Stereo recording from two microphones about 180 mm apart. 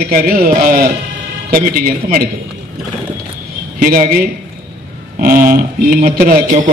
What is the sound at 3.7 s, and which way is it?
A man's voice, 50° right (ahead or behind).